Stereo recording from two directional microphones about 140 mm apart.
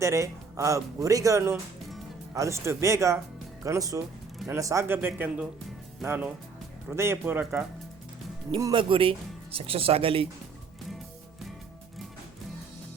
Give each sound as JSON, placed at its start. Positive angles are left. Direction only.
{"t": 0.0, "sound": "speech", "side_deg": -20}
{"t": 8.5, "sound": "speech", "side_deg": -35}